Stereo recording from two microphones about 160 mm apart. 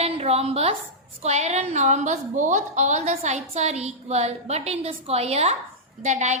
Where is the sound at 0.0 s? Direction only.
40° right (ahead or behind).